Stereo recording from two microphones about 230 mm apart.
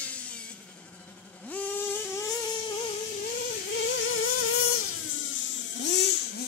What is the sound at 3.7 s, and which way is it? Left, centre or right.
Vehicle, left.